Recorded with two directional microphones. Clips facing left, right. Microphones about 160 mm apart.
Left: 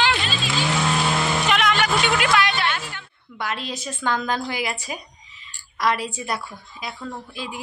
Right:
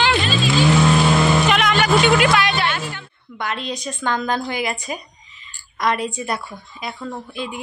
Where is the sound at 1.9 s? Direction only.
90° right.